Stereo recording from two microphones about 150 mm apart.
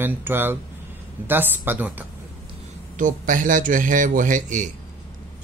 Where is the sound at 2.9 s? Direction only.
60° right (ahead or behind).